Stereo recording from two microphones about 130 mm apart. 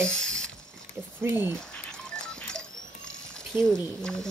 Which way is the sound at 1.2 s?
15° right (ahead or behind).